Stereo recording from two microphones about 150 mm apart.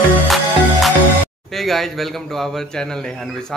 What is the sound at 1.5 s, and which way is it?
Speech, centre (ahead or behind).